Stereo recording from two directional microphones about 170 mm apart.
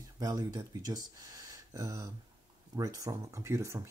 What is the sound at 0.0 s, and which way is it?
Speech, 20° right (ahead or behind).